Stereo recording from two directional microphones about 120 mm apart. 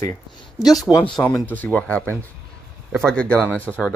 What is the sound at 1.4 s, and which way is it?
Speech, 15° left (ahead or behind).